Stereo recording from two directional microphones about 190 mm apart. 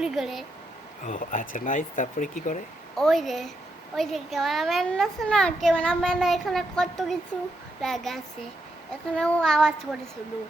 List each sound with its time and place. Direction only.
0.0 s a child's voice: 5° right (ahead or behind)
1.0 s speech: 45° left (ahead or behind)
2.9 s a child's voice: centre (ahead or behind)